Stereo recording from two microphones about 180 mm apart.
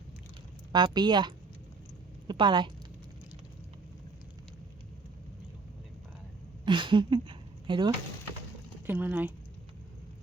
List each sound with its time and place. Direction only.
0.7 s speech: 25° right (ahead or behind)
2.2 s a sound: 25° right (ahead or behind)
6.7 s speech: 25° right (ahead or behind)
8.9 s speech: 10° right (ahead or behind)